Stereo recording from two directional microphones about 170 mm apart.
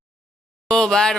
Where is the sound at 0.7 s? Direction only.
5° left (ahead or behind).